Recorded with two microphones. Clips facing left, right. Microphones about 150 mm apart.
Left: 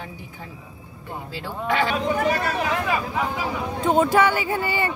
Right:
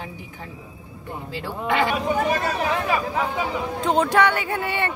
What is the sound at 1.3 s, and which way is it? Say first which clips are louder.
Speech: right 1 dB; 20° right (ahead or behind).